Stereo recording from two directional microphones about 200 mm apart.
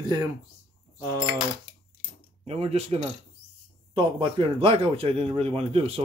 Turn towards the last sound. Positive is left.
turn(degrees=-30)  # may be behind; listen again after turning